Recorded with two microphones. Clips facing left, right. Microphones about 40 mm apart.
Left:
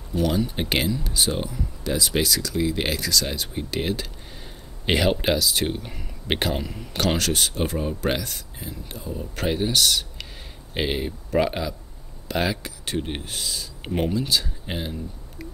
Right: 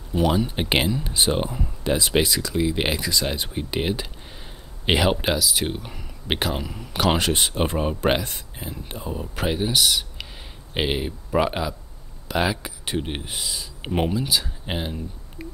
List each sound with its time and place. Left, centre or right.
0.1 s speech: centre
7.0 s speech: centre
9.2 s speech: centre
14.1 s speech: centre
14.7 s speech: centre